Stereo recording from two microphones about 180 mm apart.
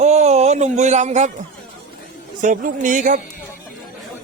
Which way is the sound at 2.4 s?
45° right (ahead or behind).